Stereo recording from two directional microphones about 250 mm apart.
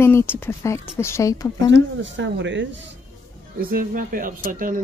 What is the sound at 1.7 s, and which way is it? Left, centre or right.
Speech, right.